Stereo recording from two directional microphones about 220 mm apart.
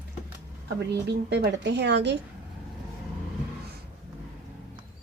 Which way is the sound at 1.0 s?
50° right (ahead or behind).